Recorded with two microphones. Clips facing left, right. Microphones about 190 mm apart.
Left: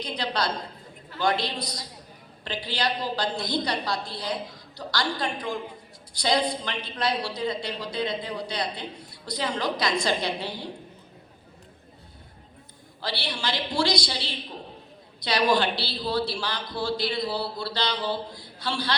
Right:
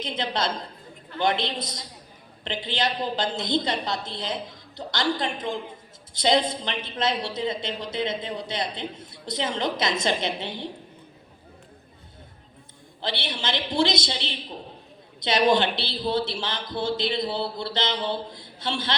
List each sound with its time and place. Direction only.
0.0 s a woman's voice: 20° right (ahead or behind)
13.0 s a woman's voice: 20° right (ahead or behind)